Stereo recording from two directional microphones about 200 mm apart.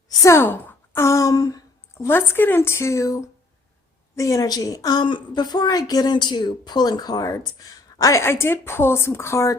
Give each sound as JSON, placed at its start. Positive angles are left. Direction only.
{"t": 0.1, "sound": "a woman's voice", "side_deg": 15}